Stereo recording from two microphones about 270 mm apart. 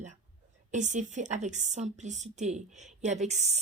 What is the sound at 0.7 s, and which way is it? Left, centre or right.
A woman's voice, right.